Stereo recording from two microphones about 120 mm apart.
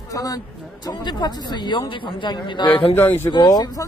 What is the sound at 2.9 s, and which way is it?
Speech, 20° left (ahead or behind).